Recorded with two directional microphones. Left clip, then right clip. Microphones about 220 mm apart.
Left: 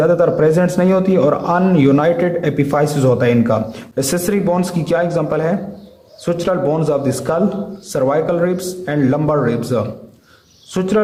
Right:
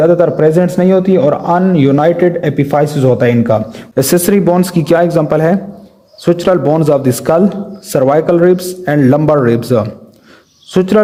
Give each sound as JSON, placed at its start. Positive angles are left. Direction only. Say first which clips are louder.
{"t": 0.0, "sound": "a man's voice", "louder": "right 4 dB", "side_deg": -25}